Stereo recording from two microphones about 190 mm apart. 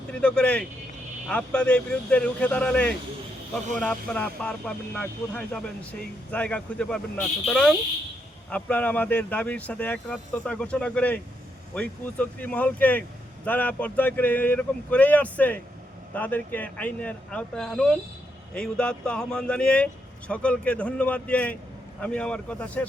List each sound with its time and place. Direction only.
0.1 s speech: 5° left (ahead or behind)